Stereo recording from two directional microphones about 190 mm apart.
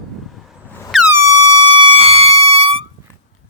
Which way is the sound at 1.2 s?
20° right (ahead or behind).